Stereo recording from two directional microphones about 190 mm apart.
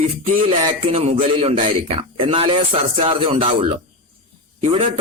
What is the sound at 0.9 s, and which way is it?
A man's voice, 35° right (ahead or behind).